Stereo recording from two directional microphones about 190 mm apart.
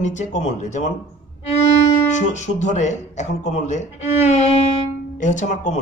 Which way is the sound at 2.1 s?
40° left (ahead or behind).